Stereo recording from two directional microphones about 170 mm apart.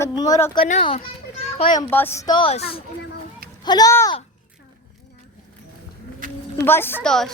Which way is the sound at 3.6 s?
20° left (ahead or behind).